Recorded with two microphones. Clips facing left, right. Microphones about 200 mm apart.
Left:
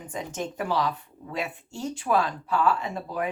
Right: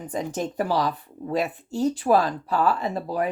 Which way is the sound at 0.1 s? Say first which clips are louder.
Right 5 dB; 35° right (ahead or behind).